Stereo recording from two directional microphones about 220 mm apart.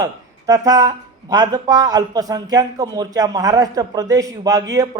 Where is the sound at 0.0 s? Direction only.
15° right (ahead or behind).